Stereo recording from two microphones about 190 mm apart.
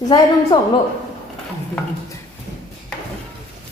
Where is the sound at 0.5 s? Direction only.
20° left (ahead or behind).